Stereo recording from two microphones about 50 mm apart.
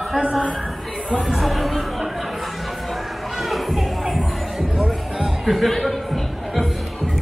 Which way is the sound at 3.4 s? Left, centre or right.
Centre.